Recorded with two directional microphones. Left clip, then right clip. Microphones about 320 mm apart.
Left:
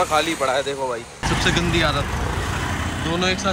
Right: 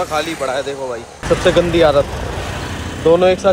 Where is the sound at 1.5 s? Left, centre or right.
Centre.